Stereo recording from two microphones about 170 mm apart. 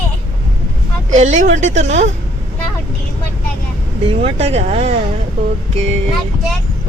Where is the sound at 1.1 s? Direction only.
45° right (ahead or behind).